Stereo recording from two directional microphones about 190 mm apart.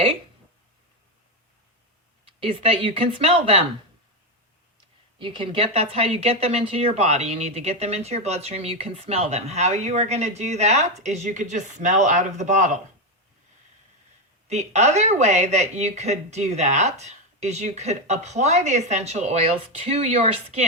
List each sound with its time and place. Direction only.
2.2 s speech: 30° right (ahead or behind)
5.2 s speech: 25° right (ahead or behind)
14.4 s speech: 35° right (ahead or behind)